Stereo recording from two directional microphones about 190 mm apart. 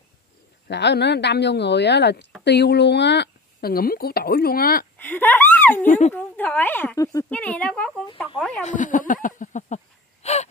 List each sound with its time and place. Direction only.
0.7 s speech: 65° left (ahead or behind)
4.9 s a sound: 10° left (ahead or behind)
5.9 s speech: 40° left (ahead or behind)
6.1 s speech: 10° left (ahead or behind)
8.6 s speech: 45° left (ahead or behind)
10.2 s gasp: 35° left (ahead or behind)